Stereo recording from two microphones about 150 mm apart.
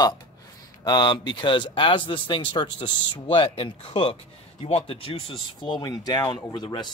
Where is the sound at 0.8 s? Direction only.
30° left (ahead or behind).